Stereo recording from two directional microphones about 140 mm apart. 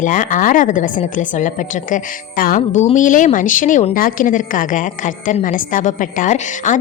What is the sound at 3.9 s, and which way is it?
A woman's voice, 85° left.